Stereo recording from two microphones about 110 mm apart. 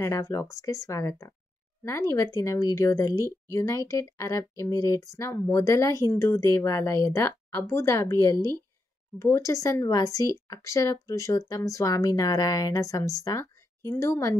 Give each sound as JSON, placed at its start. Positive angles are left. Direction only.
{"t": 0.0, "sound": "speech", "side_deg": 25}